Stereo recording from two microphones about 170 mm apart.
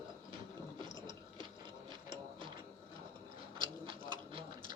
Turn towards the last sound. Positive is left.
turn(degrees=-30)  # may be behind; listen again after turning